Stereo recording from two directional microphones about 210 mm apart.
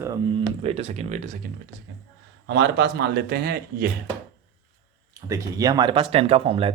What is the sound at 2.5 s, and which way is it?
Speech, 55° right (ahead or behind).